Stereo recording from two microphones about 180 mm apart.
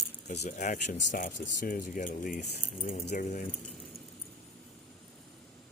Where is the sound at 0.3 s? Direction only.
40° left (ahead or behind).